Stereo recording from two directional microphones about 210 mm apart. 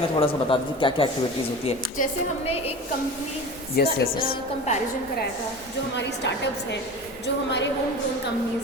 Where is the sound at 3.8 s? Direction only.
50° left (ahead or behind).